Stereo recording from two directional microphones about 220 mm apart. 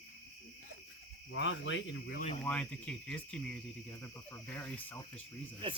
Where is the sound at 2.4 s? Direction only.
5° left (ahead or behind).